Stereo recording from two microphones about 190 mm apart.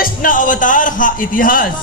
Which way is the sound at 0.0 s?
45° left (ahead or behind).